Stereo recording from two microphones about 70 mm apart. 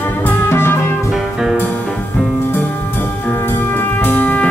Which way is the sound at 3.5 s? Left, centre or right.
Left.